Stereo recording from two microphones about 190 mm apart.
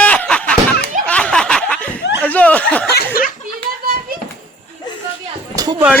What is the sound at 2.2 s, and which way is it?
Snicker, 5° left (ahead or behind).